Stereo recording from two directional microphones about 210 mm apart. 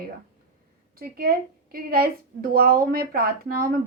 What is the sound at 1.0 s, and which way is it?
A woman's voice, 45° right (ahead or behind).